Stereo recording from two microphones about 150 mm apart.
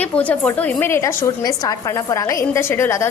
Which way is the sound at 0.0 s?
10° left (ahead or behind).